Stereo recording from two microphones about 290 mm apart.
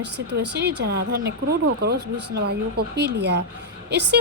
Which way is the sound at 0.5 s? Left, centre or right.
Right.